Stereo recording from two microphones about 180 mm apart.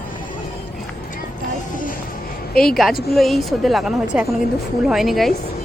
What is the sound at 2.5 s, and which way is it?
A woman's voice, 5° left (ahead or behind).